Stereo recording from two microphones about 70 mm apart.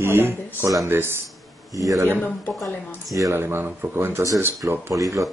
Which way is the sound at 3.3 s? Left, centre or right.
Right.